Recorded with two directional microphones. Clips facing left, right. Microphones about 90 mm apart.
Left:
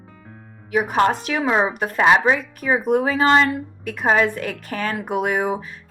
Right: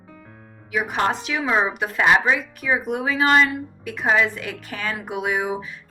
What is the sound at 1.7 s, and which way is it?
Speech, 45° left (ahead or behind).